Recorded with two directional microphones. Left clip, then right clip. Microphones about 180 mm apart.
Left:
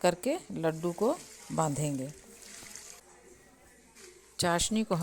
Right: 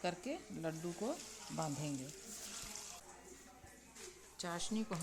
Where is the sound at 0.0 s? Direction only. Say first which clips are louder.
Left 13 dB; 40° left (ahead or behind).